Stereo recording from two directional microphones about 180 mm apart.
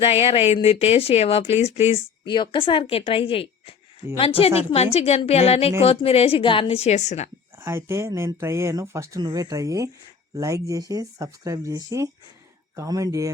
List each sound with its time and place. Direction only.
0.0 s speech: 35° left (ahead or behind)
7.6 s speech: 15° right (ahead or behind)